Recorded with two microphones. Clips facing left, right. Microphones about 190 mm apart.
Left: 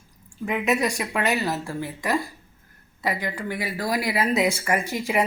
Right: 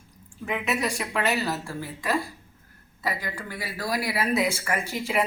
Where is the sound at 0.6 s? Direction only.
15° left (ahead or behind).